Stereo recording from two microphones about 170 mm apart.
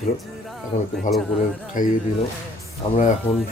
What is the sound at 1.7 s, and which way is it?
Speech, 50° left (ahead or behind).